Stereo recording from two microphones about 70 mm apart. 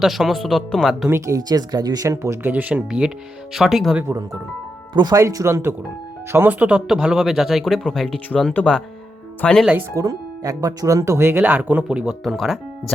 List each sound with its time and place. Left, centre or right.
0.0 s speech: centre
1.0 s speech: right
2.0 s speech: right
2.4 s speech: right
3.5 s speech: centre
4.9 s speech: right
5.2 s speech: right
6.5 s speech: centre
8.6 s speech: left
9.4 s speech: centre
9.9 s speech: right
11.8 s speech: centre